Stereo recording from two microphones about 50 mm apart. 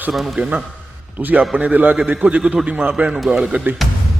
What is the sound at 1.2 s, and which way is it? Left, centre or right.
A man's voice, right.